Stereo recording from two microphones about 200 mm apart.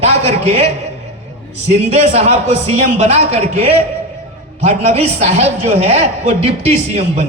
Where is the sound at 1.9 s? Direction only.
30° right (ahead or behind).